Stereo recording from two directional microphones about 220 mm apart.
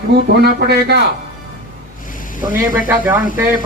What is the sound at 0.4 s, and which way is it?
Speech, 45° right (ahead or behind).